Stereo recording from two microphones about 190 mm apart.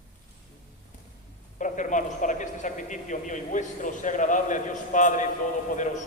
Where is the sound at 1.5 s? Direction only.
40° left (ahead or behind).